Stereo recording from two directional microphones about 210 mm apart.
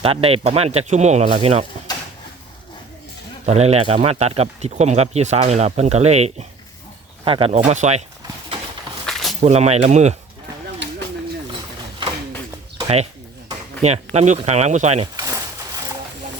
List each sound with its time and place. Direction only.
0.0 s speech: 25° right (ahead or behind)
3.4 s speech: 30° right (ahead or behind)
9.0 s a sound: centre (ahead or behind)
9.4 s speech: 30° right (ahead or behind)
12.7 s bird: 30° right (ahead or behind)
13.8 s speech: 30° right (ahead or behind)